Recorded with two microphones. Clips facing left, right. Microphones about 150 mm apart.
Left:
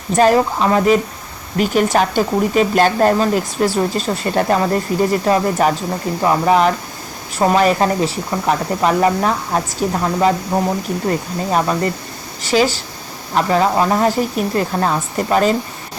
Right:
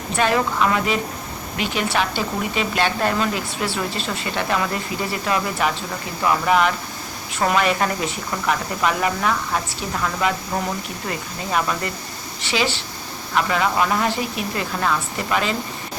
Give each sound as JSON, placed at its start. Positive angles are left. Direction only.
{"t": 0.2, "sound": "speech", "side_deg": 35}